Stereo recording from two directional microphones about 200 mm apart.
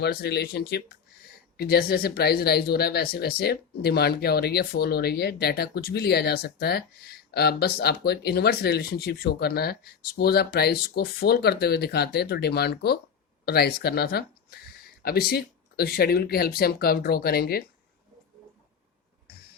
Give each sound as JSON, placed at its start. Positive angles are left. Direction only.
{"t": 0.0, "sound": "speech", "side_deg": 55}